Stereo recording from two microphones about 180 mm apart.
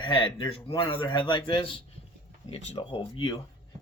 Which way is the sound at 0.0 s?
25° left (ahead or behind).